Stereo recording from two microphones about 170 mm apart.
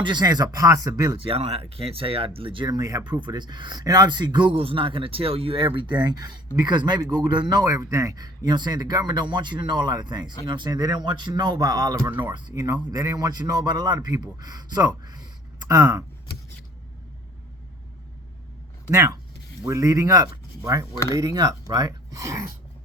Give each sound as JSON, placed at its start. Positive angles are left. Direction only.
{"t": 0.0, "sound": "speech", "side_deg": -25}
{"t": 18.9, "sound": "speech", "side_deg": -15}